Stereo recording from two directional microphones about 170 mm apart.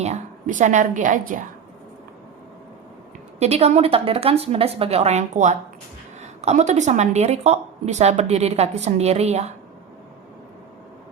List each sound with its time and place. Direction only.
0.0 s a woman's voice: 45° right (ahead or behind)
3.3 s speech: 40° right (ahead or behind)